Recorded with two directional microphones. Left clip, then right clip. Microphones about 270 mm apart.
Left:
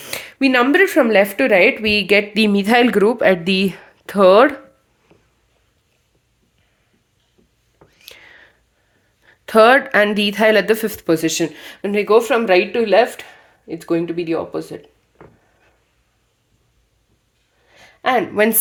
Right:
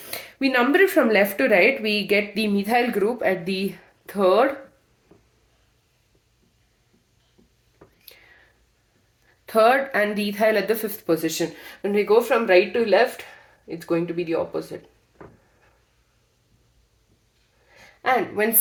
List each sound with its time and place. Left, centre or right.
0.0 s speech: left
7.9 s whispering: left
9.2 s speech: left
17.7 s a sound: left